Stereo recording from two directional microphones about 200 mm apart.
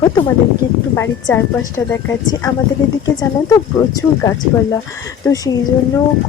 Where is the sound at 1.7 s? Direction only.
15° left (ahead or behind).